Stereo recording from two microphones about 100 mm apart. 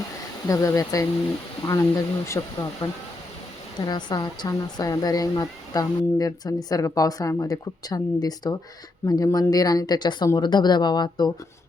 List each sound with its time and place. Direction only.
0.4 s a woman's voice: 35° left (ahead or behind)
3.8 s a woman's voice: 45° left (ahead or behind)